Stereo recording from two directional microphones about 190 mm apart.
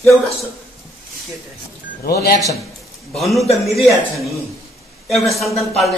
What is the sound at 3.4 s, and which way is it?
Speech, 35° left (ahead or behind).